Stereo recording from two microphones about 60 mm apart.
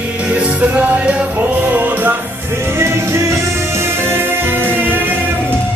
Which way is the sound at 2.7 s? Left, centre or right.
Right.